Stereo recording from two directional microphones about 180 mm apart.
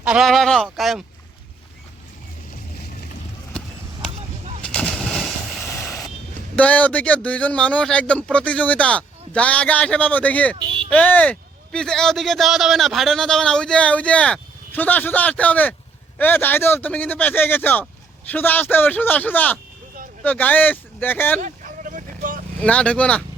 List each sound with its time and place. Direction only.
0.0 s speech: 5° right (ahead or behind)
4.6 s a sound: 5° left (ahead or behind)
6.6 s a man's voice: 10° left (ahead or behind)
10.6 s a sound: 25° right (ahead or behind)
10.9 s a man's voice: 10° left (ahead or behind)
21.4 s vehicle: 45° right (ahead or behind)
22.6 s a man's voice: 5° left (ahead or behind)